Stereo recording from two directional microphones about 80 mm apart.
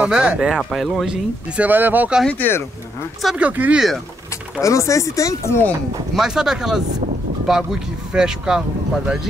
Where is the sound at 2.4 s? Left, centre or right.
Left.